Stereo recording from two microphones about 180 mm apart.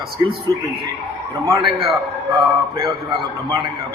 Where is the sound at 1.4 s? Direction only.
20° right (ahead or behind).